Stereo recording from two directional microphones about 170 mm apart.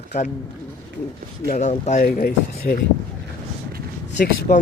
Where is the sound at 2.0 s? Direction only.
60° left (ahead or behind).